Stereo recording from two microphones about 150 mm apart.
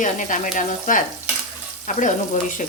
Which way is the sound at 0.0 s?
60° left (ahead or behind).